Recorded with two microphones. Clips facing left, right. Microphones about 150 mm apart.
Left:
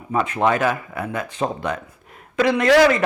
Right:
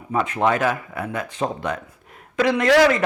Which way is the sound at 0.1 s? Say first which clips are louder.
Left 1 dB; 15° left (ahead or behind).